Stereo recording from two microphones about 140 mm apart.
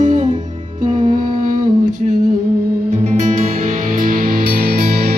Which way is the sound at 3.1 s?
60° right (ahead or behind).